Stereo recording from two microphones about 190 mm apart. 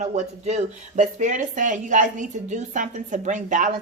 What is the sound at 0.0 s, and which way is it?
Speech, 40° right (ahead or behind).